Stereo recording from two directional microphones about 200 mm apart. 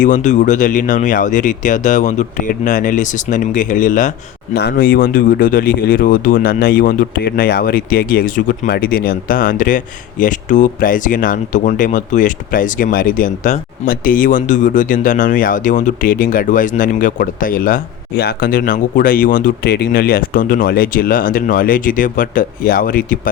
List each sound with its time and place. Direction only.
0.0 s speech: 40° left (ahead or behind)
4.5 s speech: 50° left (ahead or behind)